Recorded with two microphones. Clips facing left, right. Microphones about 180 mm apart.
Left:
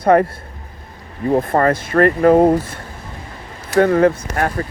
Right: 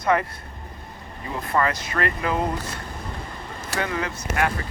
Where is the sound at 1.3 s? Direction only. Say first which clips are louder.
Left 9 dB; 50° left (ahead or behind).